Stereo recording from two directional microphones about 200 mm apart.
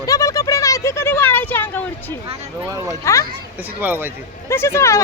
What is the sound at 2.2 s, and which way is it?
Speech, 15° right (ahead or behind).